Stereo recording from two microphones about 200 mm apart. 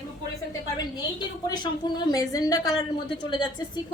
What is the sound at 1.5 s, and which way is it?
A woman's voice, 20° left (ahead or behind).